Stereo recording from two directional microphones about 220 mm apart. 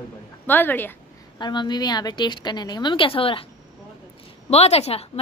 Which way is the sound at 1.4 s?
20° left (ahead or behind).